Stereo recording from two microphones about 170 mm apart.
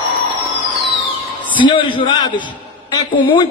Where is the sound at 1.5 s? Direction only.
30° left (ahead or behind).